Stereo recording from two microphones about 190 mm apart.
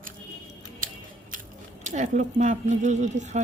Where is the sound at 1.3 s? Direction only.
45° right (ahead or behind).